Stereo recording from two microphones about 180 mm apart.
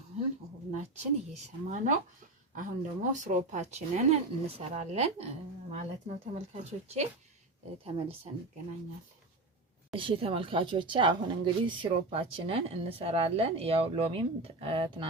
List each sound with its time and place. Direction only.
0.1 s a sound: 35° right (ahead or behind)
0.7 s speech: 40° right (ahead or behind)
3.0 s speech: 45° right (ahead or behind)
9.9 s speech: 30° right (ahead or behind)